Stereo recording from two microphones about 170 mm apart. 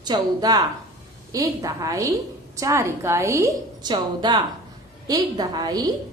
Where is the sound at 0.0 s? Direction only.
25° right (ahead or behind).